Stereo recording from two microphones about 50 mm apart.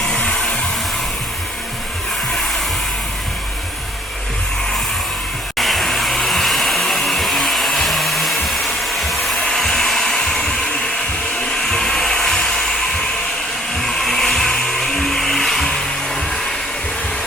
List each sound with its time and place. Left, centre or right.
0.0 s music: centre
5.5 s music: centre
9.3 s hair dryer: centre
11.7 s a sound: centre
13.8 s music: centre